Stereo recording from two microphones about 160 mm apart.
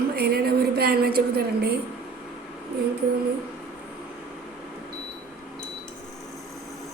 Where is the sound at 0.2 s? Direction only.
75° right (ahead or behind).